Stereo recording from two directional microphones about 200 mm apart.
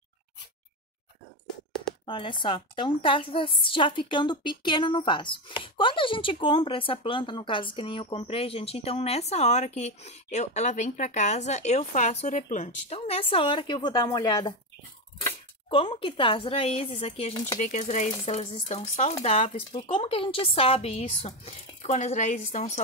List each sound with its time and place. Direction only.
2.0 s a woman's voice: 25° left (ahead or behind)
15.7 s a woman's voice: 25° left (ahead or behind)
19.7 s a woman's voice: 25° left (ahead or behind)